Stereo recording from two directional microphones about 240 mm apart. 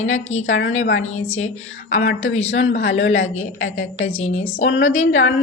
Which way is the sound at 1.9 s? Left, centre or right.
Left.